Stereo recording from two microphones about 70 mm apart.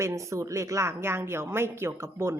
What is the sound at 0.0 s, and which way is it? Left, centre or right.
A woman's voice, right.